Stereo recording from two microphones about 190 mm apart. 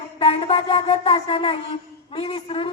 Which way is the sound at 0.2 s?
30° left (ahead or behind).